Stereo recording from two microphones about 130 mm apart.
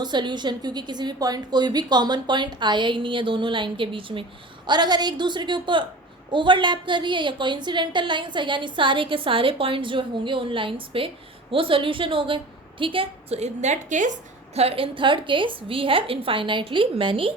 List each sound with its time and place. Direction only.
0.0 s a woman's voice: 35° right (ahead or behind); by 14.6 s 70° right (ahead or behind)
14.6 s a woman's voice: 45° right (ahead or behind)